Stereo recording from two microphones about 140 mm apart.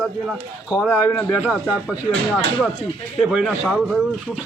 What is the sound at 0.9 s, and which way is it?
Speech, 10° left (ahead or behind).